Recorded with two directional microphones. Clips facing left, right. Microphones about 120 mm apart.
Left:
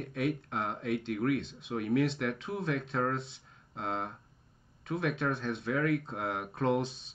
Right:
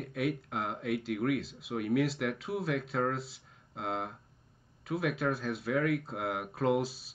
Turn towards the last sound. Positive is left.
turn(degrees=-5)  # may be behind; listen again after turning